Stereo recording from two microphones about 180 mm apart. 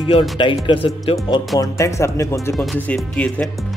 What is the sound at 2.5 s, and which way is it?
Speech, centre (ahead or behind).